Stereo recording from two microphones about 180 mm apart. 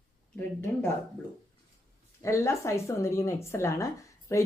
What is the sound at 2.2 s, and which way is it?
A woman's voice, 15° left (ahead or behind).